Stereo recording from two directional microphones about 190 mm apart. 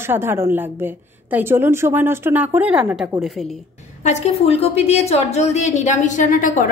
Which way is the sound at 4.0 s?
35° left (ahead or behind).